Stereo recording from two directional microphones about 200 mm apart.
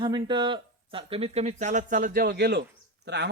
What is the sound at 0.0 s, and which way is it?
Speech, 20° right (ahead or behind).